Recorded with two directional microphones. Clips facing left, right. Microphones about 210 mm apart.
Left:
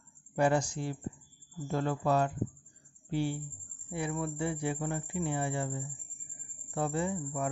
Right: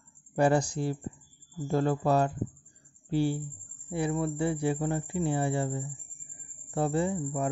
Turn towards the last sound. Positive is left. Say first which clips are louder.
# right 4 dB
turn(degrees=-35)  # may be behind; listen again after turning